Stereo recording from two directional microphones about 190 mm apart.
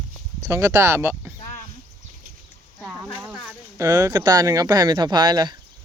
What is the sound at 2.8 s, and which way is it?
Speech, 5° right (ahead or behind).